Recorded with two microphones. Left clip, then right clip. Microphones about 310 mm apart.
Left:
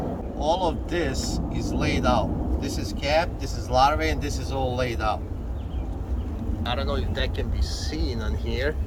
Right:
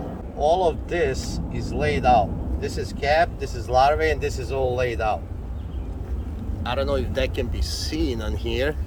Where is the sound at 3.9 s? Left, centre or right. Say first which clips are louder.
Right 4 dB; centre.